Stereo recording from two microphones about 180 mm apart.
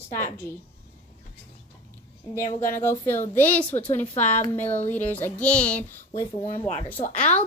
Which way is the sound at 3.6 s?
40° left (ahead or behind).